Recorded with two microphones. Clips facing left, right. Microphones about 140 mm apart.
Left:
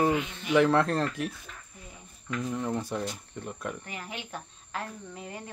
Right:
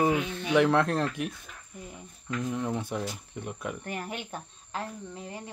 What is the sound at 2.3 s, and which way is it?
Speech, centre (ahead or behind).